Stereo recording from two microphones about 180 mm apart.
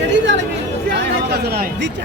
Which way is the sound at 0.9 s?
65° right (ahead or behind).